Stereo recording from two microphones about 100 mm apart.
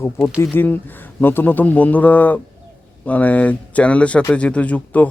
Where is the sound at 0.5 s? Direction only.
20° left (ahead or behind).